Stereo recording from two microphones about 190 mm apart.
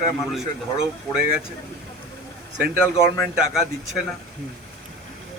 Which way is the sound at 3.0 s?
15° left (ahead or behind).